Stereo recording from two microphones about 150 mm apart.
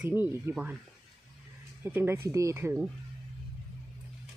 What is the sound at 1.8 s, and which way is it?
Speech, 15° right (ahead or behind).